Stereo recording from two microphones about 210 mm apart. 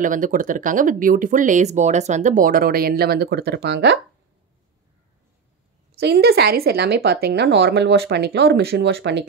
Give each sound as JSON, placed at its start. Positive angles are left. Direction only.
{"t": 0.0, "sound": "speech", "side_deg": -40}
{"t": 5.9, "sound": "a woman's voice", "side_deg": -50}